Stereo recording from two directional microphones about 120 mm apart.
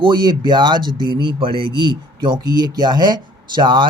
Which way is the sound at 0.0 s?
35° right (ahead or behind).